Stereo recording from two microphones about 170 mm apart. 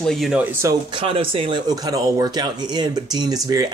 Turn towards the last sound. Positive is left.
turn(degrees=-20)  # may be behind; listen again after turning